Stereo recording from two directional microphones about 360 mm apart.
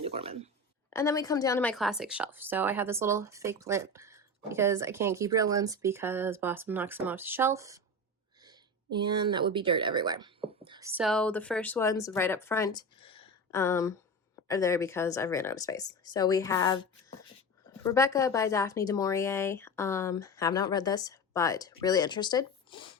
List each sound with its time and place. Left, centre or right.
0.0 s speech: centre
0.9 s speech: centre
9.0 s a woman's voice: centre
17.8 s a woman's voice: centre